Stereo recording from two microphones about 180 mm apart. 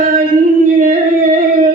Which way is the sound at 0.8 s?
50° right (ahead or behind).